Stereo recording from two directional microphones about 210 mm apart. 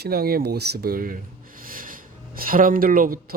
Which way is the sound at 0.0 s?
45° right (ahead or behind).